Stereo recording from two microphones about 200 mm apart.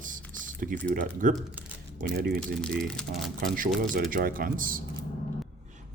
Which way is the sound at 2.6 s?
5° left (ahead or behind).